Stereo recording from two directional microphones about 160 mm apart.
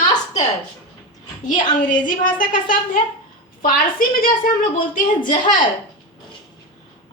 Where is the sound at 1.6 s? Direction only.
30° left (ahead or behind).